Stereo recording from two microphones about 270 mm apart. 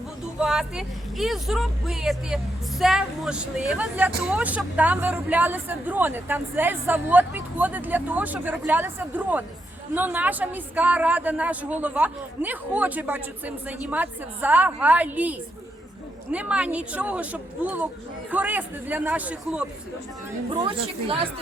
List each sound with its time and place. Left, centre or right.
0.3 s a woman's voice: centre
20.5 s speech: centre